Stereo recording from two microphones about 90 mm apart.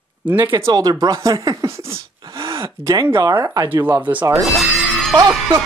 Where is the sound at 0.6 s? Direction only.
45° right (ahead or behind).